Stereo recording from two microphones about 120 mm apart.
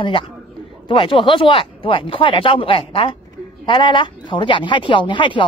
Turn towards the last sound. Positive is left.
turn(degrees=45)  # may be behind; listen again after turning